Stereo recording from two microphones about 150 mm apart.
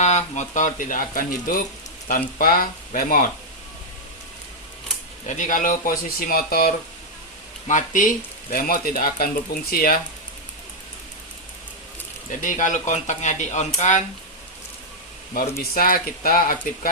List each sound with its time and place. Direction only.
0.0 s speech: 50° left (ahead or behind); by 3.2 s 70° left (ahead or behind)
5.2 s speech: 60° left (ahead or behind); by 6.7 s 80° left
7.7 s speech: 60° left (ahead or behind); by 10.0 s 75° left (ahead or behind)
12.4 s speech: 60° left (ahead or behind)
15.3 s speech: 75° left (ahead or behind)